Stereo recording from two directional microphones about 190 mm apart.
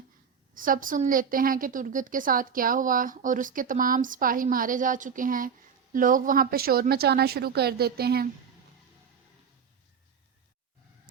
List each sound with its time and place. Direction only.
0.5 s a woman's voice: 45° right (ahead or behind)